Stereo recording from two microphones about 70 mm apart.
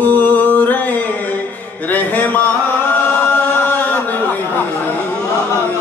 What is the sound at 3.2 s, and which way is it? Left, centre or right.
Chant, left.